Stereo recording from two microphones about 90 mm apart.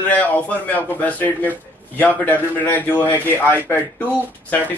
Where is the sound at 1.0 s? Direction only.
20° left (ahead or behind).